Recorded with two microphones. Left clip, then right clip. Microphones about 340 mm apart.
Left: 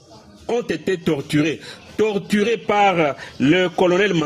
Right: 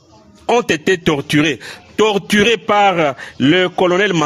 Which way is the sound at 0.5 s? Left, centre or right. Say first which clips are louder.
Right 8 dB; right.